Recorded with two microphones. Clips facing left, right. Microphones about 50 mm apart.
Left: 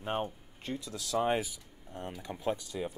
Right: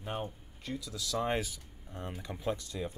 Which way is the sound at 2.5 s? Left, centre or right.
Left.